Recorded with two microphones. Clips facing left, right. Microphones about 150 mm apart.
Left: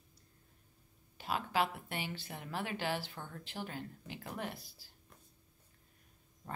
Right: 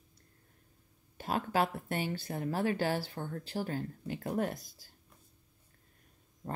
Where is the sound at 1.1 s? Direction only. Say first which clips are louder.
Right 3 dB; 45° right (ahead or behind).